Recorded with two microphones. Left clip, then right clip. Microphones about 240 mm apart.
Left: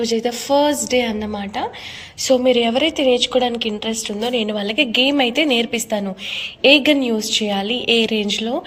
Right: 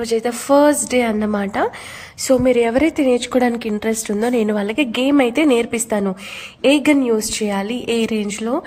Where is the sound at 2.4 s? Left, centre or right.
Right.